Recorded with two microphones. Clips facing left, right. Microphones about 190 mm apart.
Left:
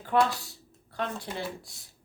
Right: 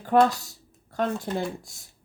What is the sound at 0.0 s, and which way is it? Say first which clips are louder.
Speech: right 5 dB; 45° right (ahead or behind).